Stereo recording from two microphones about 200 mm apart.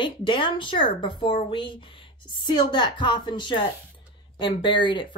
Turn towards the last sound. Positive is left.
turn(degrees=25)  # may be behind; listen again after turning